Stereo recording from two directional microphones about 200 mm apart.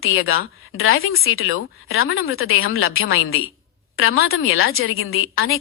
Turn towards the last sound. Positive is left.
turn(degrees=90)